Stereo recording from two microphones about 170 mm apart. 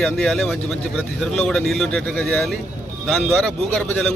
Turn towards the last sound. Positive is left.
turn(degrees=10)  # may be behind; listen again after turning